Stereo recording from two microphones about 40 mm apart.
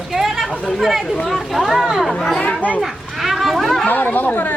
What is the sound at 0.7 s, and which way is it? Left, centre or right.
Speech, centre.